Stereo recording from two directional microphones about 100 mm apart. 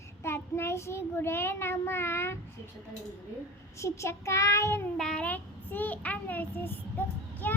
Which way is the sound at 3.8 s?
30° left (ahead or behind).